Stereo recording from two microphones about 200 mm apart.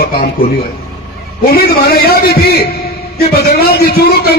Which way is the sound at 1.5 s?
50° left (ahead or behind).